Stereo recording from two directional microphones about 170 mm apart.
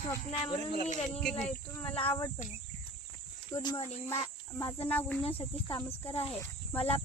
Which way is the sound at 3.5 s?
25° left (ahead or behind).